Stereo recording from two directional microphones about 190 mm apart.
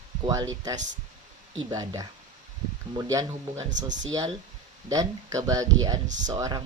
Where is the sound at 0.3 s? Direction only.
20° right (ahead or behind).